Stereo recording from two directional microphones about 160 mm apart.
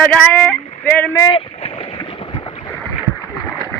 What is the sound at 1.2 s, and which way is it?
Boat, 30° left (ahead or behind).